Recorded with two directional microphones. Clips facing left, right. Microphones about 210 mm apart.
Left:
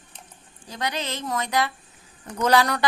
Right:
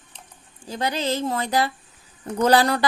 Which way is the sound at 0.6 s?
30° right (ahead or behind).